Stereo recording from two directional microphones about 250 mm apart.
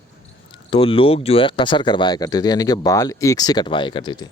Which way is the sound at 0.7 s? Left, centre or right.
Left.